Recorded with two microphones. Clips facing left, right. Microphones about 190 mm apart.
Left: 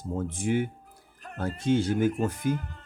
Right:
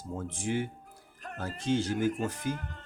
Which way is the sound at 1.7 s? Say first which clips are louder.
Left 4 dB; 55° left (ahead or behind).